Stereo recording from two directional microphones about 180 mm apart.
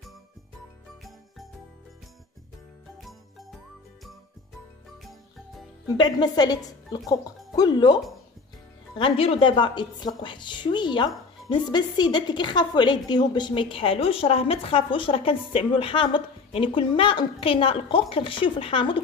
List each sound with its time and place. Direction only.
3.0 s jingle: centre (ahead or behind)
5.9 s a woman's voice: 25° left (ahead or behind)